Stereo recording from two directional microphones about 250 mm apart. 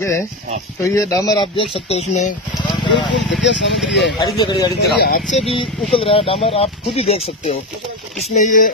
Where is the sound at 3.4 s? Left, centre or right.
Left.